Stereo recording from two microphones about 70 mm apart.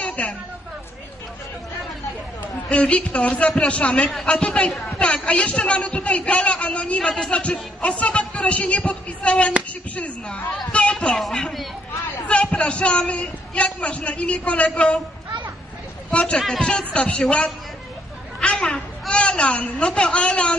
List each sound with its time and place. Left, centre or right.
0.0 s a sound: centre
2.7 s a man's voice: centre
4.1 s a woman's voice: centre
11.1 s a woman's voice: centre
12.3 s a man's voice: centre
16.1 s a man's voice: centre